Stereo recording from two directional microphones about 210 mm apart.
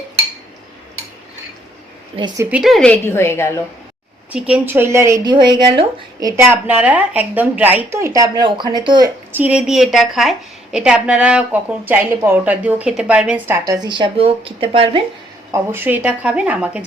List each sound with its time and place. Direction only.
2.1 s a woman's voice: 20° right (ahead or behind); by 3.6 s 10° left (ahead or behind)
4.3 s speech: 5° right (ahead or behind)
9.3 s a woman's voice: 5° right (ahead or behind)
13.5 s speech: 15° right (ahead or behind)
15.5 s speech: 10° right (ahead or behind)